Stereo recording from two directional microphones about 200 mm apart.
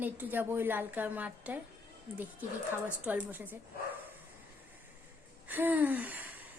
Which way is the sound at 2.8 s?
10° right (ahead or behind).